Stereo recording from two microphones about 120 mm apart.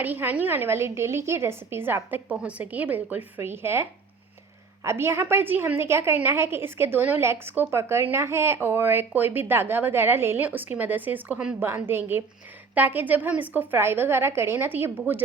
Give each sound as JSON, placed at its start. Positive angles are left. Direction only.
{"t": 0.0, "sound": "a woman's voice", "side_deg": -15}